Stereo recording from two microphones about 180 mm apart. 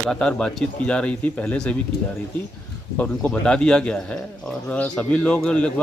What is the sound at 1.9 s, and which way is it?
Speech, 65° left (ahead or behind).